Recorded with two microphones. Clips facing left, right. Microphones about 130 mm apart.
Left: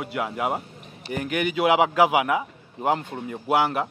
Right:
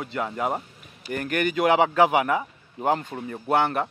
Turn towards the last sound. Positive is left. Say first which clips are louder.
# even
turn(degrees=5)  # may be behind; listen again after turning